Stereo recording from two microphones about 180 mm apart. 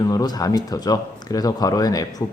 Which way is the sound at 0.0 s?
20° left (ahead or behind).